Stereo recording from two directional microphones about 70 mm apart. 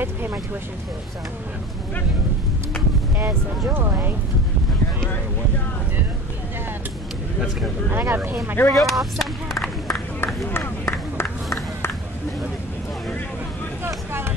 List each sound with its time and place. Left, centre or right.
0.0 s speech: right
3.7 s speech: right
8.1 s speech: right
8.7 s vehicle: centre
10.2 s a sound: left